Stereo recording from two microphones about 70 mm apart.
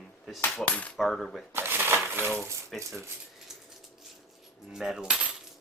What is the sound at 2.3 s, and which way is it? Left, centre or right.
Speech, centre.